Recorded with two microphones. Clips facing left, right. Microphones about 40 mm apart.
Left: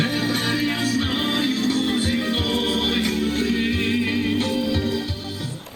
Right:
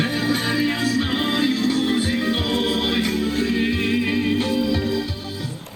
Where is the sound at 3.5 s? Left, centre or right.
Centre.